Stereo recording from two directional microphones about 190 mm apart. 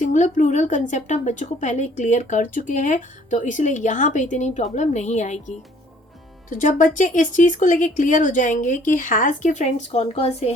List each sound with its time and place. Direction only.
0.0 s a woman's voice: 40° left (ahead or behind)